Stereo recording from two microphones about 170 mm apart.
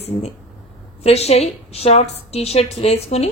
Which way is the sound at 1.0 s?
40° left (ahead or behind).